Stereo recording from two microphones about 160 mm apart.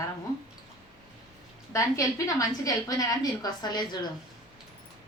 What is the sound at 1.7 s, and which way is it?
A woman's voice, 20° left (ahead or behind).